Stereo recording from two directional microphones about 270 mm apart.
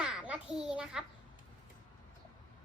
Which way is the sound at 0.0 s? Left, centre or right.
Centre.